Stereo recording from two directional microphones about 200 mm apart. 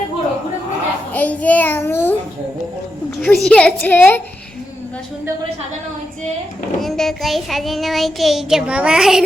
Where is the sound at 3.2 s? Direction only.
5° left (ahead or behind).